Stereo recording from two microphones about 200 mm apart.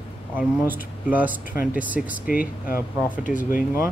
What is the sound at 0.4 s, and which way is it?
Speech, 5° right (ahead or behind).